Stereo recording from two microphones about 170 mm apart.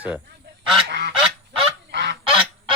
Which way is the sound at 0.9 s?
80° right.